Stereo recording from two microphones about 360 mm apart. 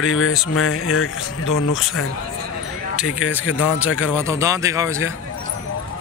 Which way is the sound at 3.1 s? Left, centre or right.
Centre.